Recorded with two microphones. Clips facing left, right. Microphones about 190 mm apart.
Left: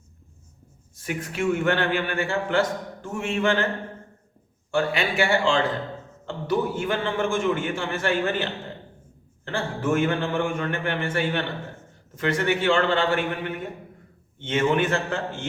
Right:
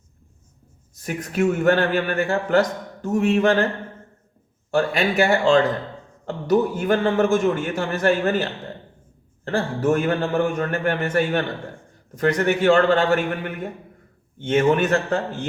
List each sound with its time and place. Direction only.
1.0 s a man's voice: 40° right (ahead or behind)
4.7 s a man's voice: 40° right (ahead or behind)
14.4 s a man's voice: 40° right (ahead or behind)